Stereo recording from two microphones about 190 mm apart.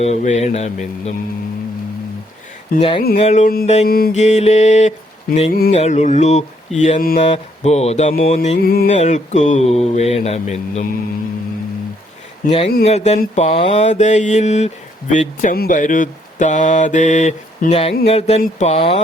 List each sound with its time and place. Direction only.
0.0 s speech: 35° left (ahead or behind)
2.7 s speech: 30° left (ahead or behind); by 3.7 s 45° left (ahead or behind)
3.8 s music: 50° left (ahead or behind)
4.2 s speech: 35° left (ahead or behind)
8.5 s music: 50° left (ahead or behind)
9.0 s speech: 40° left (ahead or behind)
12.5 s speech: 30° left (ahead or behind)